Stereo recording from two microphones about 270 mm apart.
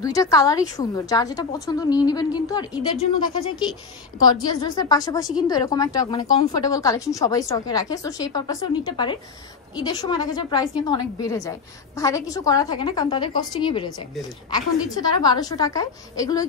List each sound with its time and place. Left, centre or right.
0.0 s a woman's voice: centre
4.2 s a woman's voice: centre